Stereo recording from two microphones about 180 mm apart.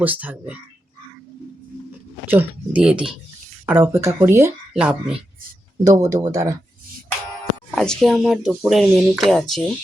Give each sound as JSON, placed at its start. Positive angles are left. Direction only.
{"t": 0.0, "sound": "speech", "side_deg": -10}
{"t": 1.9, "sound": "speech", "side_deg": -10}
{"t": 5.8, "sound": "speech", "side_deg": -20}
{"t": 7.8, "sound": "speech", "side_deg": 0}